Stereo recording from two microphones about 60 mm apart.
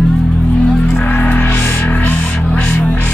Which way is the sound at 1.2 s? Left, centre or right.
Left.